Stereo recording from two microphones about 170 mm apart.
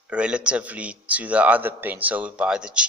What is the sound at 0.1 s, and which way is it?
A man's voice, 5° right (ahead or behind).